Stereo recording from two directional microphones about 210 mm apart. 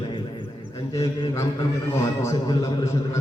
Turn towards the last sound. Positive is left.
turn(degrees=15)  # may be behind; listen again after turning